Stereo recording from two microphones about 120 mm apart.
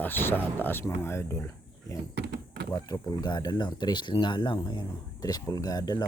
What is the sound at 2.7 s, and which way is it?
Speech, 35° left (ahead or behind).